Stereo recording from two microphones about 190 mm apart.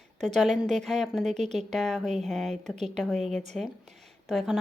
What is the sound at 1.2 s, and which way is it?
Speech, 35° right (ahead or behind).